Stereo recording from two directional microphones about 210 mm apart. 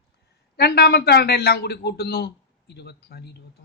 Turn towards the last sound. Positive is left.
turn(degrees=50)  # may be behind; listen again after turning